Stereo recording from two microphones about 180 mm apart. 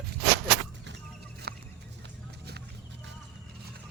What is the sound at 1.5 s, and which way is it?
Fowl, 65° right (ahead or behind).